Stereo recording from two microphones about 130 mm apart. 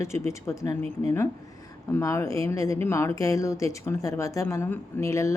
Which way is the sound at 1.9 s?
20° left (ahead or behind).